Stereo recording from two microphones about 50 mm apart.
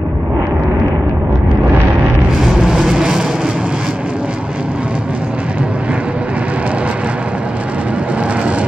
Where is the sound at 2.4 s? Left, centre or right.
Centre.